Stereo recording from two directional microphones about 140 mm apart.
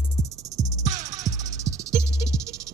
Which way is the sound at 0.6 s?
25° right (ahead or behind).